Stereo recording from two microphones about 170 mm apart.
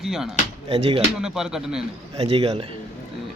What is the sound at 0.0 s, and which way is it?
Speech, centre (ahead or behind).